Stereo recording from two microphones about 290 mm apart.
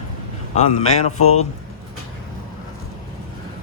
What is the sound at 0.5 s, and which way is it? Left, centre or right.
Speech, left.